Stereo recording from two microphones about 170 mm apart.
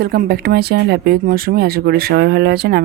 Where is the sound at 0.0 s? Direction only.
65° right (ahead or behind).